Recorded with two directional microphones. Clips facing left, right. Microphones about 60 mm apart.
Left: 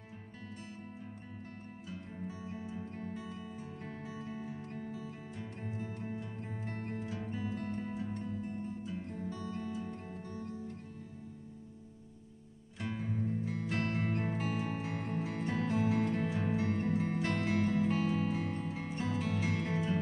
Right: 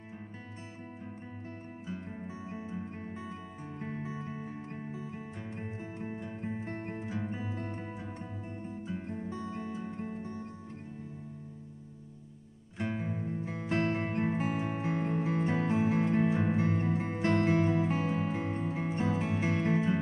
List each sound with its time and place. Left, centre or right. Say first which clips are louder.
2.5 s music: right 3 dB; right
12.7 s music: right 3 dB; right